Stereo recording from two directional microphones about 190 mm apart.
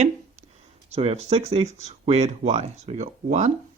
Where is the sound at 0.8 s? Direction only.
35° right (ahead or behind).